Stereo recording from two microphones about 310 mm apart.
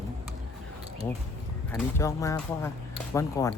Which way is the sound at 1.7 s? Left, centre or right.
Centre.